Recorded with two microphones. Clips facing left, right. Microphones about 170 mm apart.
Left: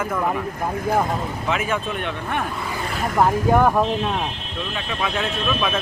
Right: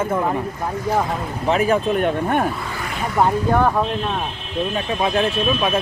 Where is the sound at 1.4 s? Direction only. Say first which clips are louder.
Right 8 dB; 35° right (ahead or behind).